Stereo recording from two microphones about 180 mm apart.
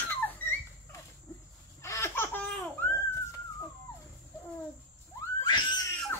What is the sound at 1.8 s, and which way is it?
Laughter, 15° left (ahead or behind).